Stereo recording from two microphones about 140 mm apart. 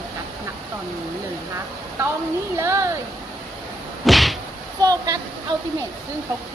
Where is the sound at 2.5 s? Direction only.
20° right (ahead or behind).